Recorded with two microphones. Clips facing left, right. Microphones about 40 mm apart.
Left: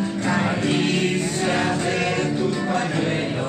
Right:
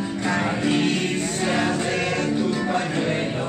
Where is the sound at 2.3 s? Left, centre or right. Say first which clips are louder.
Even; centre.